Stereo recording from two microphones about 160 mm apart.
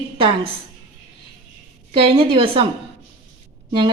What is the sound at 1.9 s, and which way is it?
Speech, 35° right (ahead or behind).